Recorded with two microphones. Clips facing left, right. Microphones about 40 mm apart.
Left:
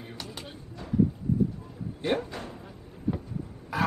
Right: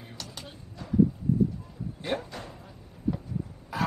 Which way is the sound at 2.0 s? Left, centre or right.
Centre.